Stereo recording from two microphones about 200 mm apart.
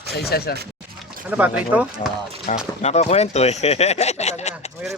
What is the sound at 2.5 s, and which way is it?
Speech, 35° left (ahead or behind).